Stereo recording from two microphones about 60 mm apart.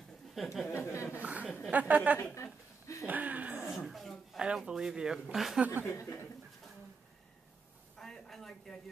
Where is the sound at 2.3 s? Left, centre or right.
Left.